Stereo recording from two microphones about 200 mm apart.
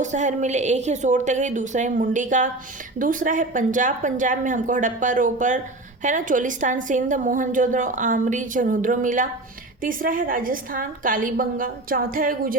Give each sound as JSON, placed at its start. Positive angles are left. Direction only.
{"t": 0.0, "sound": "a woman's voice", "side_deg": -35}